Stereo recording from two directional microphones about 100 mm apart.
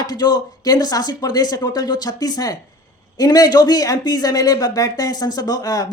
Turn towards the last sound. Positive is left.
turn(degrees=35)  # may be behind; listen again after turning